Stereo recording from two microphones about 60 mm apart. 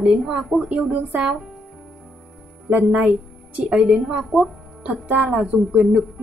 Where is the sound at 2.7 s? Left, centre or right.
Right.